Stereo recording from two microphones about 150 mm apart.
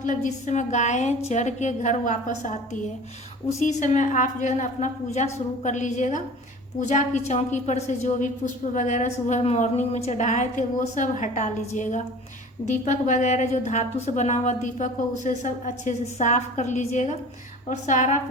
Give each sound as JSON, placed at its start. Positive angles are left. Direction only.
{"t": 0.0, "sound": "a woman's voice", "side_deg": 60}
{"t": 3.6, "sound": "a woman's voice", "side_deg": 55}